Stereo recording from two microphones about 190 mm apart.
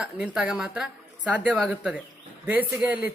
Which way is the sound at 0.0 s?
5° right (ahead or behind).